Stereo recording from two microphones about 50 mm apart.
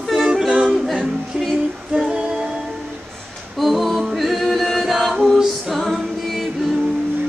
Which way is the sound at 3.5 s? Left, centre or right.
Centre.